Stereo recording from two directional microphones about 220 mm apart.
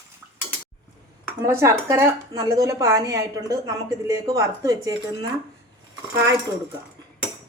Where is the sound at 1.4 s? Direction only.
10° right (ahead or behind).